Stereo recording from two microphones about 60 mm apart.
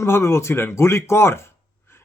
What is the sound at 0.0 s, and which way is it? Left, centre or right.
Speech, left.